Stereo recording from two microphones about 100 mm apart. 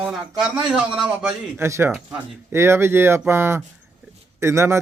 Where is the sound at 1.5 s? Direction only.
25° right (ahead or behind).